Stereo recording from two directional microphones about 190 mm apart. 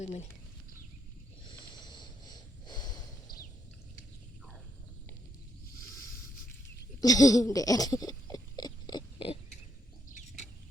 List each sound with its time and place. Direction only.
0.0 s speech: 35° left (ahead or behind)
1.5 s snort: 25° left (ahead or behind)
7.0 s a sound: 20° left (ahead or behind)